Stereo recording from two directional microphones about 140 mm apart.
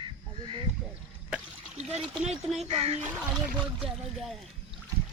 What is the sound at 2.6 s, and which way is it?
Speech, 45° right (ahead or behind).